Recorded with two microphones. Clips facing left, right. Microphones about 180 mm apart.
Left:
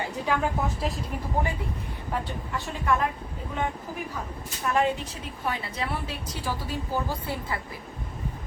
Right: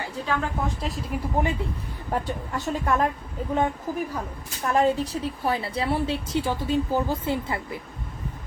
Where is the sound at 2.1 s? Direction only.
45° right (ahead or behind).